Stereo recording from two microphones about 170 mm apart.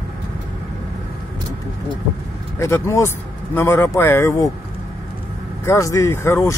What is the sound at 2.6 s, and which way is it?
Speech, 15° left (ahead or behind).